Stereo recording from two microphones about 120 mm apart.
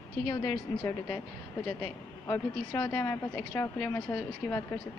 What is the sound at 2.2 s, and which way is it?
Speech, 20° left (ahead or behind).